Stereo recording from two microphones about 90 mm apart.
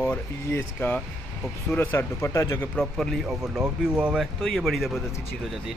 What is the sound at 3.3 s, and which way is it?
Speech, 5° right (ahead or behind).